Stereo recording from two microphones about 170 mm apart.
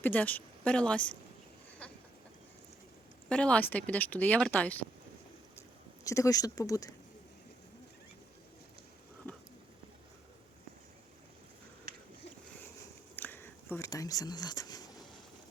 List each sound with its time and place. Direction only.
0.0 s speech: 10° left (ahead or behind)
3.2 s speech: 5° left (ahead or behind)
6.1 s speech: 20° left (ahead or behind)
13.1 s a sound: 10° left (ahead or behind)